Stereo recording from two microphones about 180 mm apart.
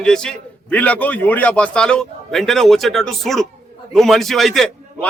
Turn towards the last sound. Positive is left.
turn(degrees=0)  # may be behind; listen again after turning